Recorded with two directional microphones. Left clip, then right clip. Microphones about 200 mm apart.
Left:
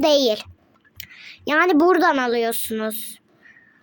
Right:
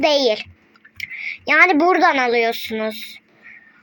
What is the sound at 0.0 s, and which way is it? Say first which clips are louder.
A woman's voice: right 1 dB; 45° left (ahead or behind).